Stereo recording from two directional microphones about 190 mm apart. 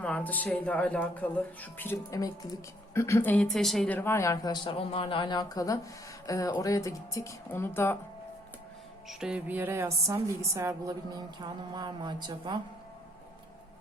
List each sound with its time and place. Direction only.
0.0 s speech: 10° left (ahead or behind)
9.0 s a woman's voice: 5° right (ahead or behind); by 12.5 s 25° right (ahead or behind)